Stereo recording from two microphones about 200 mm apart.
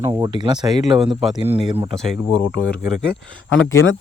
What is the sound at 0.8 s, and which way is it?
Speech, centre (ahead or behind).